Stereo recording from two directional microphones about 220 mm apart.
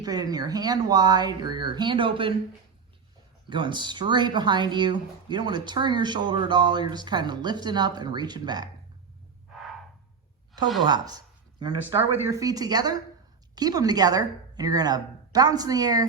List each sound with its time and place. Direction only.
0.0 s speech: 15° right (ahead or behind)
3.5 s speech: 20° right (ahead or behind)
10.8 s a woman's voice: 20° right (ahead or behind)